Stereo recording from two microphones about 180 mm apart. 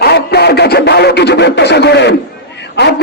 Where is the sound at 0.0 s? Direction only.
65° left (ahead or behind).